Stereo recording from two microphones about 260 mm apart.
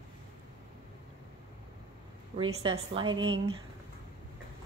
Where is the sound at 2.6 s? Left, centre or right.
Centre.